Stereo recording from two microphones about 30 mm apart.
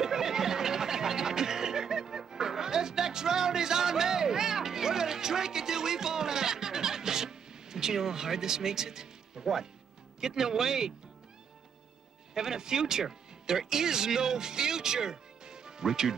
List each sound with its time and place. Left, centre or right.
0.0 s music: centre
10.2 s speech: centre
12.4 s speech: centre